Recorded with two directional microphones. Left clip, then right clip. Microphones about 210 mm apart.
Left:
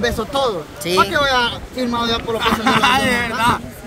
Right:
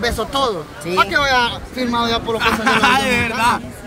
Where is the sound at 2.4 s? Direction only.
Centre (ahead or behind).